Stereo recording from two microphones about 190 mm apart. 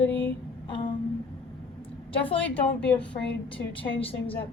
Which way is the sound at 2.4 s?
5° left (ahead or behind).